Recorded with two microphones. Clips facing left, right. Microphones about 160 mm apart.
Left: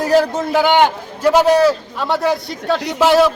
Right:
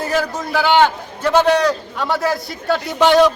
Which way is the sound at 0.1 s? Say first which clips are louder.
Left 9 dB; 30° left (ahead or behind).